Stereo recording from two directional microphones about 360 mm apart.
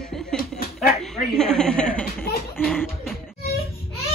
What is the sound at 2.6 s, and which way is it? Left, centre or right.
Speech, centre.